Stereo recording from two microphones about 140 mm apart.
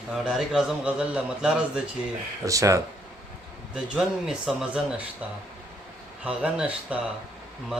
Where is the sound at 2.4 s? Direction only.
25° right (ahead or behind).